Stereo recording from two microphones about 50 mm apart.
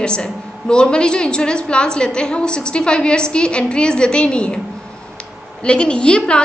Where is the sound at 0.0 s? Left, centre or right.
Centre.